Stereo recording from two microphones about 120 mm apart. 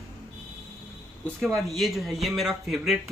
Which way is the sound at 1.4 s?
Centre (ahead or behind).